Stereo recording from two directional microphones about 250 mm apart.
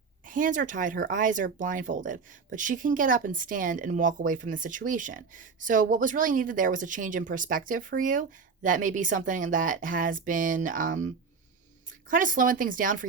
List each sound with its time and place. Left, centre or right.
0.3 s speech: right